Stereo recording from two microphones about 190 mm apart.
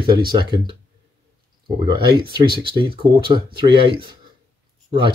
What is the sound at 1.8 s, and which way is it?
Speech, 25° right (ahead or behind).